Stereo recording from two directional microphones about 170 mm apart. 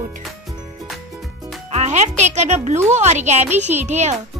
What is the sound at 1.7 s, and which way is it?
Speech, 40° right (ahead or behind).